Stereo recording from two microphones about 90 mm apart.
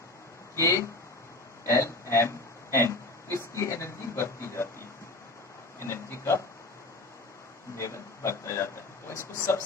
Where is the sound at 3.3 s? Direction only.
30° left (ahead or behind).